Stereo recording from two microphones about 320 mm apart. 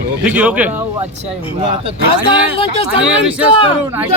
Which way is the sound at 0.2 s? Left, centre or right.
Centre.